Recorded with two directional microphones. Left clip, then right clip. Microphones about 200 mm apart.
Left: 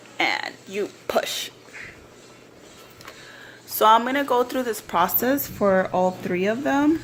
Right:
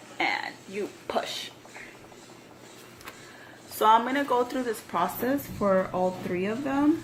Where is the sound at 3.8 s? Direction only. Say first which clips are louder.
Left 4 dB; 45° left (ahead or behind).